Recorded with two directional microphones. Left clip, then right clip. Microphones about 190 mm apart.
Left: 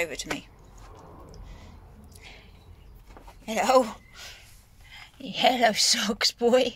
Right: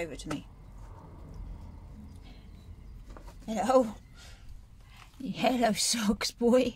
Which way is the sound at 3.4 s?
10° right (ahead or behind).